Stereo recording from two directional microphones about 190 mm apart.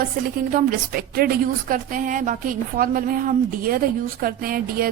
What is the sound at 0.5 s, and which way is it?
A woman's voice, 50° right (ahead or behind).